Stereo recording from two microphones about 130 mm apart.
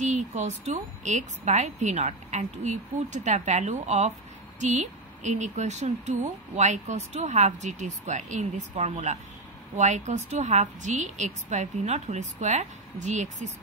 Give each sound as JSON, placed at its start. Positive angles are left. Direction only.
{"t": 0.1, "sound": "speech", "side_deg": -65}